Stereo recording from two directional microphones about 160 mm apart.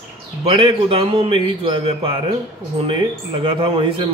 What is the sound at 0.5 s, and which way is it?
A man's voice, 35° right (ahead or behind).